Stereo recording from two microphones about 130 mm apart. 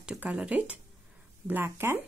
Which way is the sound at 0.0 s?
10° right (ahead or behind).